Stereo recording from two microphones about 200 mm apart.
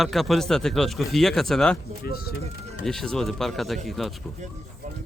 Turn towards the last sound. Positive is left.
turn(degrees=0)  # may be behind; listen again after turning